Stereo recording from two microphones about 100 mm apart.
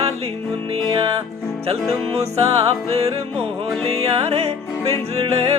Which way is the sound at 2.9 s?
90° right.